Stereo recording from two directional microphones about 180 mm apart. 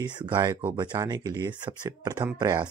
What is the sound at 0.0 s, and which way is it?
Speech, 25° right (ahead or behind).